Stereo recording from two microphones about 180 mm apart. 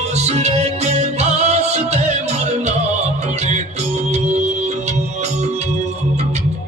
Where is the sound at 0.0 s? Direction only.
35° right (ahead or behind).